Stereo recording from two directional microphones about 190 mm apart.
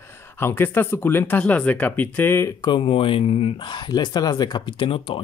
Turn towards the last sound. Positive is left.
turn(degrees=25)  # may be behind; listen again after turning